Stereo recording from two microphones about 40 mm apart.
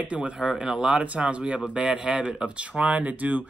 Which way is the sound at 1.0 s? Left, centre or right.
Right.